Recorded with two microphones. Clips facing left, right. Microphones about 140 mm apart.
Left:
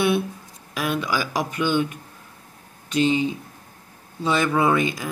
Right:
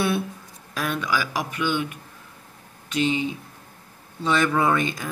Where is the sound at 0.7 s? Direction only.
15° left (ahead or behind).